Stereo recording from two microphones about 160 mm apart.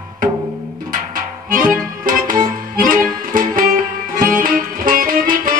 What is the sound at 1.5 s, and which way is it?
Music, 60° right (ahead or behind).